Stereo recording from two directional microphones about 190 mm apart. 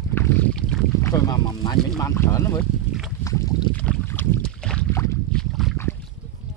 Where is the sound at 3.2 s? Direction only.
15° left (ahead or behind).